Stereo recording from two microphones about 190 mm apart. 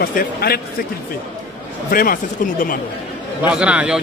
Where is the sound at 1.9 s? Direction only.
50° left (ahead or behind).